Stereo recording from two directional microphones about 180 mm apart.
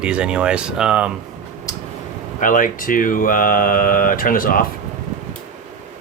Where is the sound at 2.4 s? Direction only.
50° left (ahead or behind).